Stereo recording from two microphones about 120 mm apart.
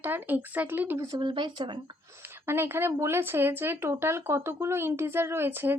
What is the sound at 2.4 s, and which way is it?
Speech, 20° right (ahead or behind).